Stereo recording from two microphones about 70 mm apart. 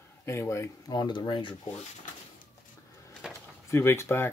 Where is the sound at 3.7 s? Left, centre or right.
Left.